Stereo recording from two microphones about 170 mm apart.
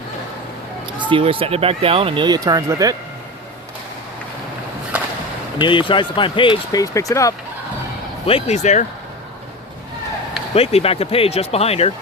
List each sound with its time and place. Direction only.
1.1 s speech: 30° right (ahead or behind)
4.9 s whip: 10° right (ahead or behind)
5.6 s speech: 30° left (ahead or behind)
8.3 s speech: 35° left (ahead or behind)
10.5 s speech: 35° left (ahead or behind)